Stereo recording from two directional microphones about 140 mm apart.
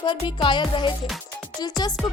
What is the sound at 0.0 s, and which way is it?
Music, 35° left (ahead or behind).